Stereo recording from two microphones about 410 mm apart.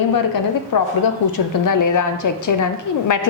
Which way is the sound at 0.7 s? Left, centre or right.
Left.